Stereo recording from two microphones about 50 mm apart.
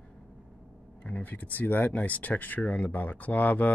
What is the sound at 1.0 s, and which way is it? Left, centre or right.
Speech, left.